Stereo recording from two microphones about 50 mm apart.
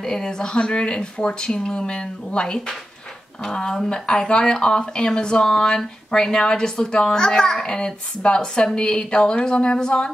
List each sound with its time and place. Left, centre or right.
0.0 s speech: centre